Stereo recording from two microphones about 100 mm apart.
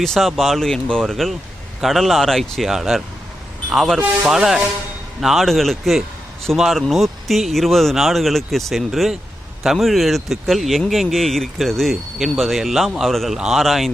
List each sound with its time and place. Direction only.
0.0 s speech: centre (ahead or behind)